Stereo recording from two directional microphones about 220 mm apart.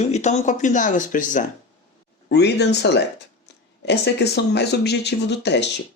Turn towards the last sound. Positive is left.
turn(degrees=50)  # may be behind; listen again after turning